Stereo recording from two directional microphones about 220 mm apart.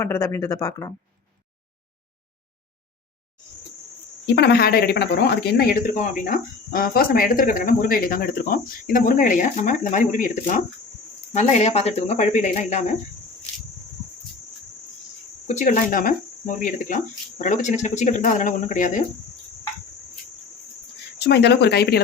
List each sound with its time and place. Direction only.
0.0 s speech: 10° left (ahead or behind)
4.4 s speech: 50° left (ahead or behind); by 12.8 s 30° left (ahead or behind)
15.4 s speech: 35° left (ahead or behind)
21.2 s speech: 50° left (ahead or behind)